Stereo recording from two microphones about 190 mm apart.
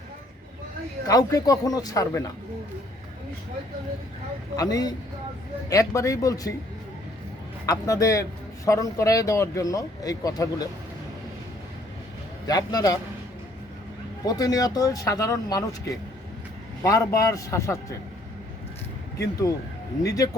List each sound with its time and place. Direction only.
1.0 s speech: 20° left (ahead or behind)
4.5 s speech: 20° left (ahead or behind)
7.7 s speech: 15° left (ahead or behind)
12.5 s speech: 20° left (ahead or behind)
14.3 s speech: 20° left (ahead or behind)
20.1 s speech: 20° left (ahead or behind)